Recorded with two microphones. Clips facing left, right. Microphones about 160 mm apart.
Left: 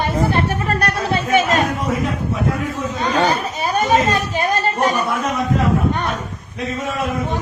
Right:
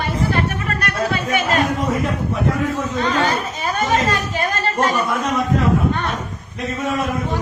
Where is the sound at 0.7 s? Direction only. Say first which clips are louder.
Left 4 dB; 35° left (ahead or behind).